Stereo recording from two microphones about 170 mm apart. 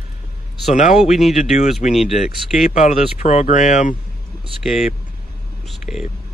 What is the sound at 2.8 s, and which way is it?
Speech, 40° left (ahead or behind).